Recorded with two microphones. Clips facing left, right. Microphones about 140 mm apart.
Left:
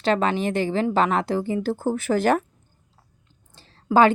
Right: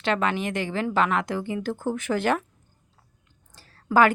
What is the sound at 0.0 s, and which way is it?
A woman's voice, 35° left (ahead or behind).